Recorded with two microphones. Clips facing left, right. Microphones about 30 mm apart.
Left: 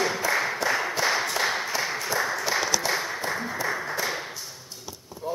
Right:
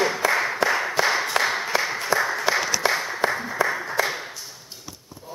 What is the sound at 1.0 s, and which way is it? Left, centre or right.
Clapping, centre.